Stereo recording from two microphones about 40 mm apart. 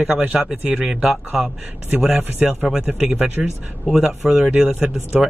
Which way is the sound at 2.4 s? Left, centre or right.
Right.